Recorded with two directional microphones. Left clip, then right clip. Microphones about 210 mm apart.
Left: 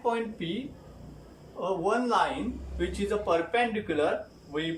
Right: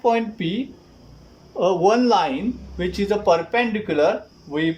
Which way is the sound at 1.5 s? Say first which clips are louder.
Right 11 dB; 40° right (ahead or behind).